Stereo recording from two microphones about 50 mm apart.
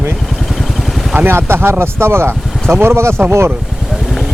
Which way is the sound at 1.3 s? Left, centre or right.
Right.